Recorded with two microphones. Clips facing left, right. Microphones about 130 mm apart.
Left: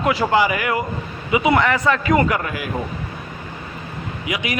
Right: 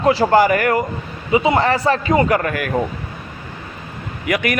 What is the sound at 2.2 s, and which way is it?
Speech, 50° right (ahead or behind).